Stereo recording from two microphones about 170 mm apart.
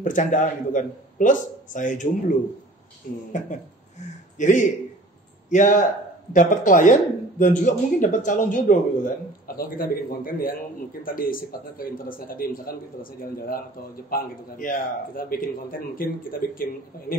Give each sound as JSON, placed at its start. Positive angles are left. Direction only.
{"t": 0.0, "sound": "speech", "side_deg": 50}
{"t": 4.4, "sound": "a man's voice", "side_deg": 50}